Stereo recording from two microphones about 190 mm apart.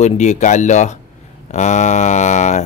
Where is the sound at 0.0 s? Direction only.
40° left (ahead or behind).